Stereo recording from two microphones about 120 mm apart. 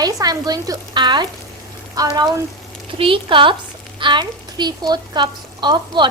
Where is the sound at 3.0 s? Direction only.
45° right (ahead or behind).